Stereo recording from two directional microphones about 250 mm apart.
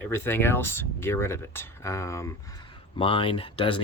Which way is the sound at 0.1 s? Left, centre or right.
Centre.